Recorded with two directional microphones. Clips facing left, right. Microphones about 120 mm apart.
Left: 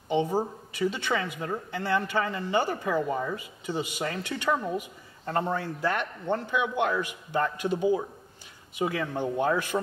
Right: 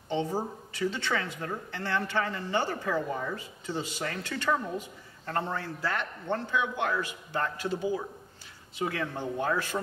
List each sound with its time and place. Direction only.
0.1 s speech: 15° left (ahead or behind)